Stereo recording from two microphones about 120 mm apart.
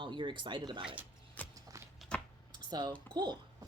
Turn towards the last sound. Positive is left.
turn(degrees=-35)  # may be behind; listen again after turning